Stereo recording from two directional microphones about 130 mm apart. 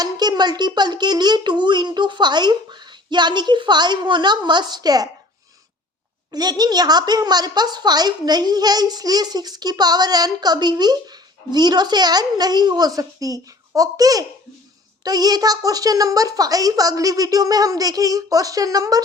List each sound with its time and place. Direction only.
0.0 s a woman's voice: 35° right (ahead or behind)
6.3 s a woman's voice: 30° right (ahead or behind)